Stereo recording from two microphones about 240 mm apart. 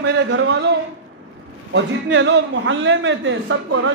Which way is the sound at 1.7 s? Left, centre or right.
Right.